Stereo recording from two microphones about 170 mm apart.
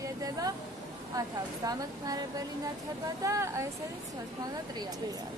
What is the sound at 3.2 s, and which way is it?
Speech, 15° right (ahead or behind).